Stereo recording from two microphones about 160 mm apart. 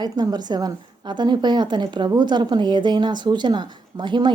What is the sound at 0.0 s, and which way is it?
A woman's voice, 25° right (ahead or behind).